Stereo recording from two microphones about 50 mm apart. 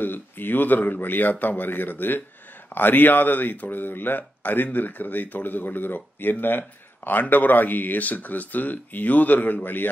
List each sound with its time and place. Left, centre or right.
0.0 s speech: left